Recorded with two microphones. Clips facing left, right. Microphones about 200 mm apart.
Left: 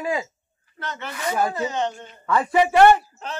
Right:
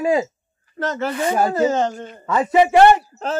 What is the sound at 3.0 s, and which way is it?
Speech, 45° right (ahead or behind).